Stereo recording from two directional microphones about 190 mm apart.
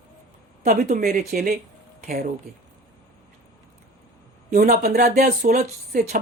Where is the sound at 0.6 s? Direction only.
40° right (ahead or behind).